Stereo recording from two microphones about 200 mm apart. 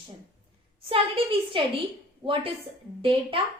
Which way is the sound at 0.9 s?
25° right (ahead or behind).